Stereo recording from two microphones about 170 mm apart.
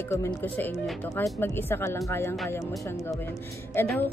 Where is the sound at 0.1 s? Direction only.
15° left (ahead or behind).